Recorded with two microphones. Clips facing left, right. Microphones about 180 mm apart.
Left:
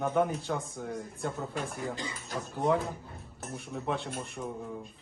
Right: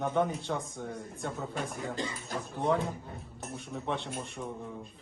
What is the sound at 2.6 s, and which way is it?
Speech, centre (ahead or behind).